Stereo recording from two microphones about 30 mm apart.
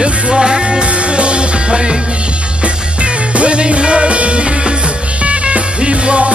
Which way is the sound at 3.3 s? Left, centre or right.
Right.